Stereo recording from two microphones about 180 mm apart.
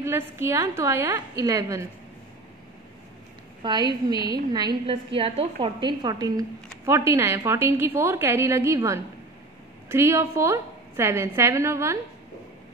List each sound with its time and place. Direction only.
0.0 s a woman's voice: 15° right (ahead or behind)
3.6 s a woman's voice: 20° right (ahead or behind)